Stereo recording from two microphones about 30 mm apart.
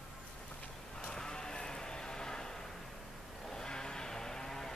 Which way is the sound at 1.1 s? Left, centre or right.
Left.